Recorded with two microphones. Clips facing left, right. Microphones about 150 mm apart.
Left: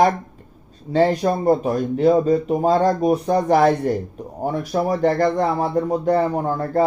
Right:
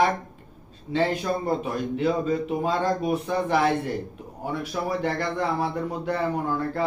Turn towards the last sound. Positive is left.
turn(degrees=40)  # may be behind; listen again after turning